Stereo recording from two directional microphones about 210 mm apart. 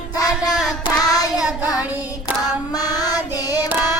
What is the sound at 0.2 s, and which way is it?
Child singing, 15° left (ahead or behind).